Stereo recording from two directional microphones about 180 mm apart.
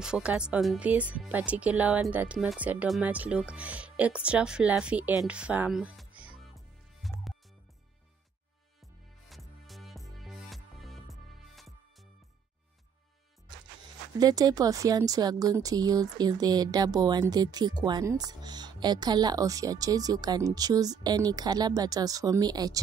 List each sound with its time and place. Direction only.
0.0 s speech: 5° right (ahead or behind)
9.3 s music: centre (ahead or behind)
14.2 s speech: 20° right (ahead or behind)